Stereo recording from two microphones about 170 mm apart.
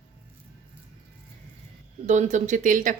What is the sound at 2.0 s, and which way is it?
Speech, 45° right (ahead or behind).